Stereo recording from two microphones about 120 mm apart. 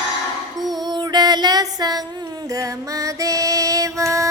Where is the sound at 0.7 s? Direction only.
35° right (ahead or behind).